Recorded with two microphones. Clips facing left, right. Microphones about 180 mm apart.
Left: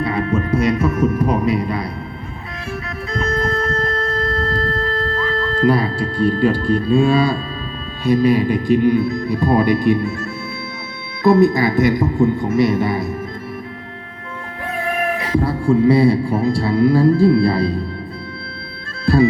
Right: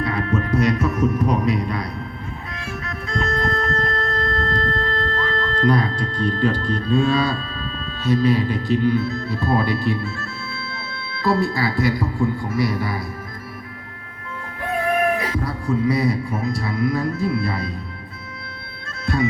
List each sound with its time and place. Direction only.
0.0 s speech: centre (ahead or behind)
2.8 s music: centre (ahead or behind)
8.0 s speech: 15° left (ahead or behind)
15.4 s a man's voice: 30° left (ahead or behind)
19.0 s bagpipes: 35° left (ahead or behind)